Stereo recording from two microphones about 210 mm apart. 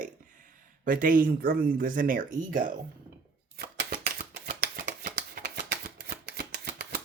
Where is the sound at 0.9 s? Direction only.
40° right (ahead or behind).